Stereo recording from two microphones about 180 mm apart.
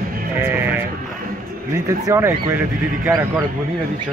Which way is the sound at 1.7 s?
15° right (ahead or behind).